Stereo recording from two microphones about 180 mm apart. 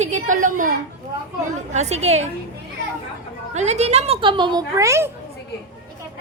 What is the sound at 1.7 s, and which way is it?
Speech, 40° right (ahead or behind).